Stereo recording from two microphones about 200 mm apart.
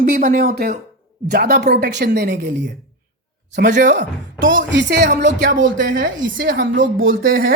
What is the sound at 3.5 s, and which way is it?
Speech, 55° right (ahead or behind).